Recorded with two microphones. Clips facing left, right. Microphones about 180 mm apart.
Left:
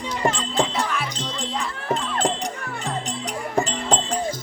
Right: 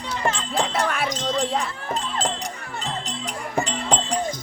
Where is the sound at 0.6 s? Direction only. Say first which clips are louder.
Right 2 dB; 60° right (ahead or behind).